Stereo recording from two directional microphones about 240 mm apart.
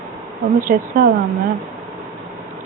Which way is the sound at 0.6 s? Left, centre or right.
Right.